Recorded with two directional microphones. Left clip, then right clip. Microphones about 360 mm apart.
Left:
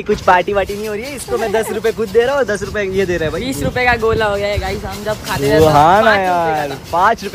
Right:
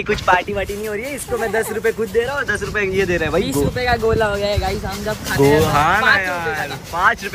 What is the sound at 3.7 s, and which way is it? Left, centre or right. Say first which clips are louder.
Speech: left 10 dB; left.